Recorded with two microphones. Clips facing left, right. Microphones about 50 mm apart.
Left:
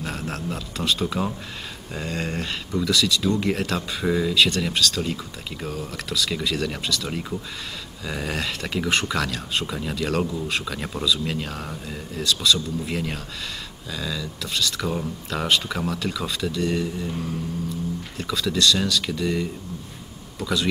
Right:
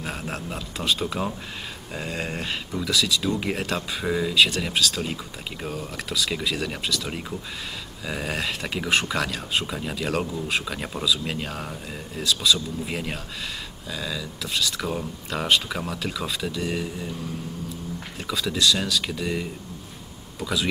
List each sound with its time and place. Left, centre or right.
0.0 s speech: centre
18.2 s speech: centre